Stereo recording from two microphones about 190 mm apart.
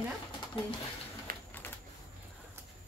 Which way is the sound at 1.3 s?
45° right (ahead or behind).